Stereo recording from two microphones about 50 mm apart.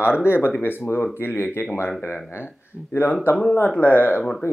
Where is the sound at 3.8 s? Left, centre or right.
Left.